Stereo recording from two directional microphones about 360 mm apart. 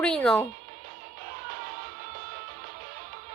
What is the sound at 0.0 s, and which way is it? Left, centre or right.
Speech, centre.